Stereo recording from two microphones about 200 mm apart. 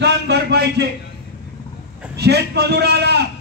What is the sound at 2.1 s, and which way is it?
A man's voice, 55° right (ahead or behind).